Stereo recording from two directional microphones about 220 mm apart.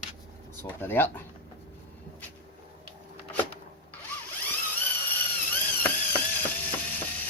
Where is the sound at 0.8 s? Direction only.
10° left (ahead or behind).